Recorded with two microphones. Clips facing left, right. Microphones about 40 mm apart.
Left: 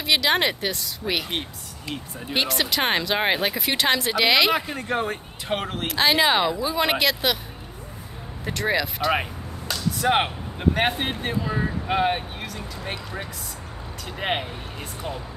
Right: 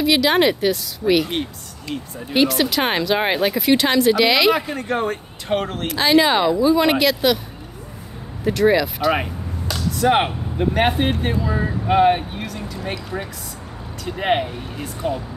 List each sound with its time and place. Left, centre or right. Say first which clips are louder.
0.0 s a woman's voice: right 5 dB; centre
8.5 s speech: right 8 dB; centre
14.0 s a woman's voice: right 7 dB; centre